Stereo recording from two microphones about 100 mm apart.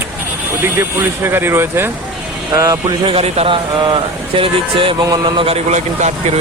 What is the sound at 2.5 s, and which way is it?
Speech, 35° right (ahead or behind).